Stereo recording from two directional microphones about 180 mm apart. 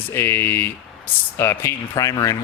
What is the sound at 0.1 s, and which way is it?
Speech, 15° left (ahead or behind).